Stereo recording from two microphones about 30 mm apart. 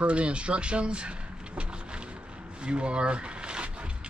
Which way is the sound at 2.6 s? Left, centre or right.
Right.